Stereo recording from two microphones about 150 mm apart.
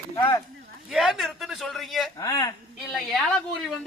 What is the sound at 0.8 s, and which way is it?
Speech, centre (ahead or behind).